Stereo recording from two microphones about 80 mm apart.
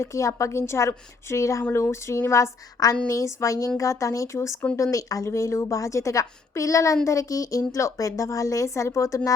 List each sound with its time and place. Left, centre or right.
0.0 s a woman's voice: left